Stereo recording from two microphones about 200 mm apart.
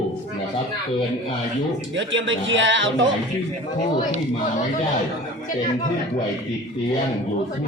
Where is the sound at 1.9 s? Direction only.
70° right (ahead or behind).